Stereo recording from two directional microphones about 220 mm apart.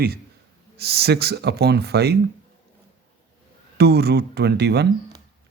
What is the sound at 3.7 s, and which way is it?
A man's voice, 45° right (ahead or behind).